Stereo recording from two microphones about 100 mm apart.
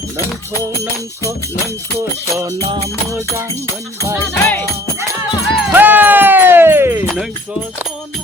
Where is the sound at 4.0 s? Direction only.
30° right (ahead or behind).